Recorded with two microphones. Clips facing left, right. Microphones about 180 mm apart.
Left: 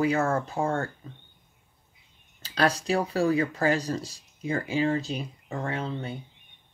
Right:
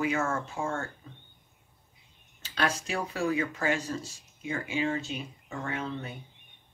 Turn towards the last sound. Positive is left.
turn(degrees=30)  # may be behind; listen again after turning